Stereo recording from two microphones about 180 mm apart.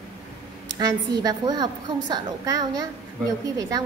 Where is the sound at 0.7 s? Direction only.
20° right (ahead or behind).